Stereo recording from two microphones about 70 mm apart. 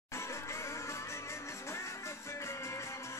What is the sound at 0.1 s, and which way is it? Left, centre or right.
Music, left.